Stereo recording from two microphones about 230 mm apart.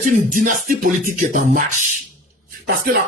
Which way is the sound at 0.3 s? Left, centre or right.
Right.